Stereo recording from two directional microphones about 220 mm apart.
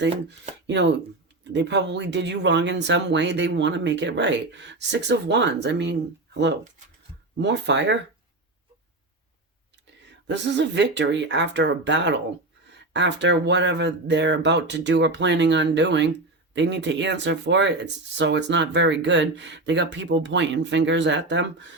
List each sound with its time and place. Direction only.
0.0 s speech: 55° right (ahead or behind)
10.1 s speech: 55° right (ahead or behind)